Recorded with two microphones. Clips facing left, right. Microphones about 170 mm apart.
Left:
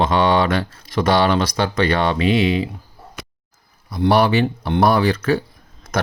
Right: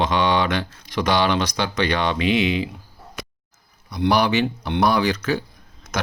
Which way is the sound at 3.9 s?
50° left (ahead or behind).